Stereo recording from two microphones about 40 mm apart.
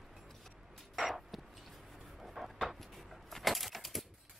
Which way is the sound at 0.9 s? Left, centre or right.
Centre.